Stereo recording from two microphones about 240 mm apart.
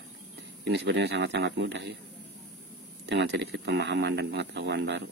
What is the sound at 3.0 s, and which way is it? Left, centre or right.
Speech, right.